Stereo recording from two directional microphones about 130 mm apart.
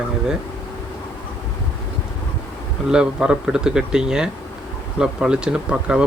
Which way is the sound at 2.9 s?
5° right (ahead or behind).